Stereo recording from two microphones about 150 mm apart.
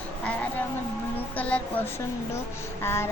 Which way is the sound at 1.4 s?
10° left (ahead or behind).